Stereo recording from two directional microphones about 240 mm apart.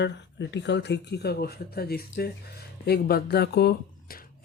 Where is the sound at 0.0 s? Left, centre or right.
Left.